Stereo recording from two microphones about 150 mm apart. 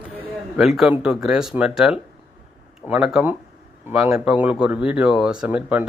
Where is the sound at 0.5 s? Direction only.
5° right (ahead or behind).